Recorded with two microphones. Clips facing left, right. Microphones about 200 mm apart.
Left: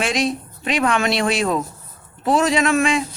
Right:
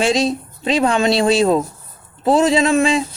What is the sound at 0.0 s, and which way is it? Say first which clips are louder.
Speech: right 4 dB; 25° right (ahead or behind).